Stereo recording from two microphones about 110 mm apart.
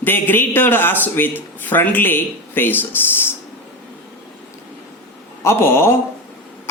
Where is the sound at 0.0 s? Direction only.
20° left (ahead or behind).